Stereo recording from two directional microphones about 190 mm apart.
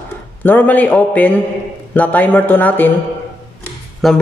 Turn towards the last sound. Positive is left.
turn(degrees=0)  # may be behind; listen again after turning